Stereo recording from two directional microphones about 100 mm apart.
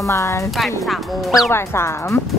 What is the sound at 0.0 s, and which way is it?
Speech, 30° left (ahead or behind).